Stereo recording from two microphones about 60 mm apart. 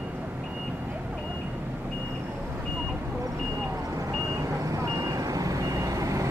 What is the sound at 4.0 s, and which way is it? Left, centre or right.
Vehicle, right.